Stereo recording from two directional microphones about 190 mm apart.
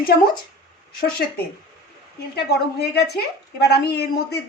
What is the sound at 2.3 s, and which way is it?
A woman's voice, 60° left (ahead or behind).